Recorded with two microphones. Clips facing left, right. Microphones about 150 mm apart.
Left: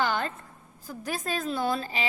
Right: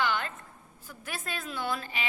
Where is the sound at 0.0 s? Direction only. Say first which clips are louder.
Left 3 dB; 40° left (ahead or behind).